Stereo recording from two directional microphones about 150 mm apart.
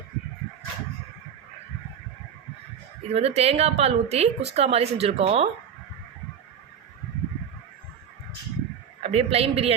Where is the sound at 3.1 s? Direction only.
45° right (ahead or behind).